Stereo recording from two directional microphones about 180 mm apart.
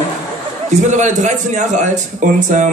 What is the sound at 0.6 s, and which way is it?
A man's voice, 40° right (ahead or behind).